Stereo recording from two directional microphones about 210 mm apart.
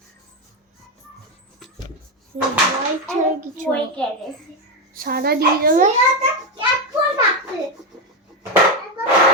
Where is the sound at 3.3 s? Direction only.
40° right (ahead or behind).